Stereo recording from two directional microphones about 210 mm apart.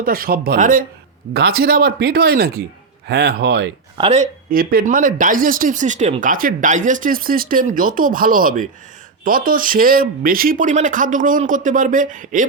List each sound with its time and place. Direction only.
0.0 s speech: 45° right (ahead or behind)
3.9 s speech: 30° right (ahead or behind)